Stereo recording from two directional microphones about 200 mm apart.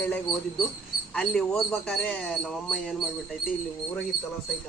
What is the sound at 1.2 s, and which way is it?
Speech, 5° left (ahead or behind).